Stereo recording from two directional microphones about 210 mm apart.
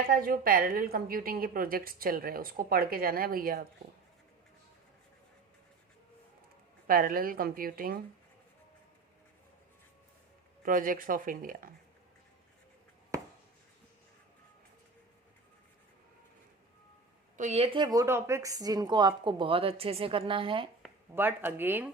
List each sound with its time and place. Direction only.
0.0 s a woman's voice: 45° right (ahead or behind)
6.8 s a woman's voice: 40° right (ahead or behind)
10.6 s speech: 40° right (ahead or behind)
17.3 s a woman's voice: 30° right (ahead or behind)
20.8 s speech: 10° right (ahead or behind)